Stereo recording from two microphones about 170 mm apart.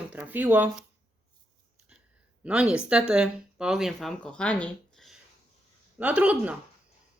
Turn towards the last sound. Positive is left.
turn(degrees=-5)  # may be behind; listen again after turning